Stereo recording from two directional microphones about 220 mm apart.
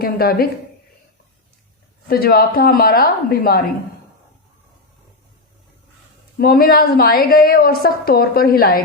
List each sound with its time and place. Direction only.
0.0 s a woman's voice: 45° left (ahead or behind)
2.0 s a woman's voice: 45° left (ahead or behind)
6.4 s a woman's voice: 45° left (ahead or behind)